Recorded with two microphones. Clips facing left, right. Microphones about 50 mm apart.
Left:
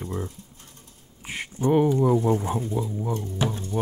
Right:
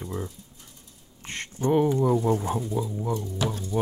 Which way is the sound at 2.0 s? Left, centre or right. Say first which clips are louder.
Left 2 dB; centre.